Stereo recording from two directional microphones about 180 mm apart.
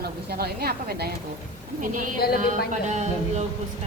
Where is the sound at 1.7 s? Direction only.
45° right (ahead or behind).